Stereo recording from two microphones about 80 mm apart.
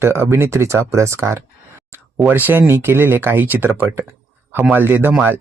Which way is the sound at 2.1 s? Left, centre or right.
Right.